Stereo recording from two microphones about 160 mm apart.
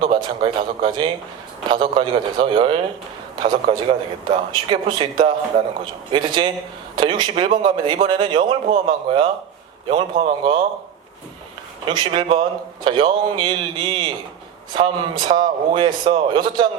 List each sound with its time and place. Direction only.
0.0 s a man's voice: 30° right (ahead or behind)
11.9 s a man's voice: 30° right (ahead or behind)